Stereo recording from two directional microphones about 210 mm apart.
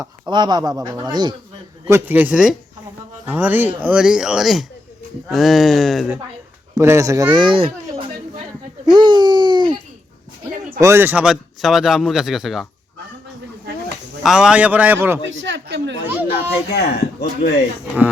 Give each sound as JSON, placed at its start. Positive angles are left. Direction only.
{"t": 0.0, "sound": "speech", "side_deg": -20}
{"t": 1.9, "sound": "a man's voice", "side_deg": -10}
{"t": 6.7, "sound": "speech", "side_deg": -15}
{"t": 8.9, "sound": "a sound", "side_deg": -20}
{"t": 10.8, "sound": "a man's voice", "side_deg": -10}
{"t": 14.3, "sound": "speech", "side_deg": -5}
{"t": 15.3, "sound": "speech", "side_deg": -60}
{"t": 16.1, "sound": "speech", "side_deg": -10}
{"t": 16.7, "sound": "speech", "side_deg": 50}